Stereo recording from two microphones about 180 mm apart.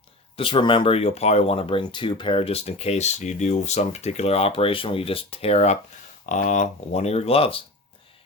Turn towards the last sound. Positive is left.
turn(degrees=30)  # may be behind; listen again after turning